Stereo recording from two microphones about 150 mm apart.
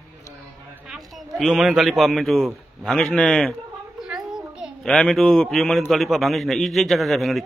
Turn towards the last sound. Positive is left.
turn(degrees=0)  # may be behind; listen again after turning